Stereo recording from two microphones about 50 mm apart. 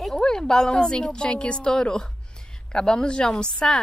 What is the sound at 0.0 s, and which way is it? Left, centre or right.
A woman's voice, centre.